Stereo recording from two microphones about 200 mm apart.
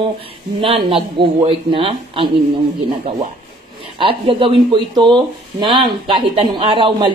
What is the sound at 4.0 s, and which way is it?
Speech, 25° right (ahead or behind).